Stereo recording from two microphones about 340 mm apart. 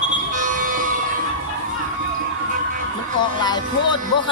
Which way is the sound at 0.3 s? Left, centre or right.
Right.